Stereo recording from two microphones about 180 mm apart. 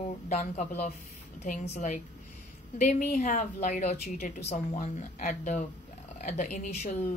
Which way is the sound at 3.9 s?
60° left (ahead or behind).